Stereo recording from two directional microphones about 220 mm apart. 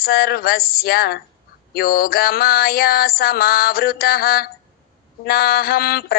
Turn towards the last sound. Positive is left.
turn(degrees=45)  # may be behind; listen again after turning